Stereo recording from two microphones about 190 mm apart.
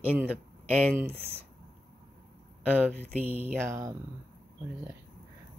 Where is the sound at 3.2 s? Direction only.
30° left (ahead or behind).